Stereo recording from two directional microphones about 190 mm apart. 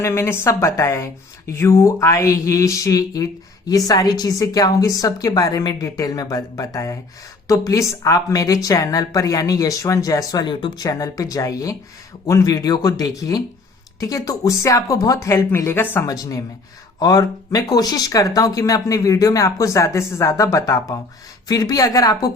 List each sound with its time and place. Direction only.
0.0 s a woman's voice: 15° left (ahead or behind)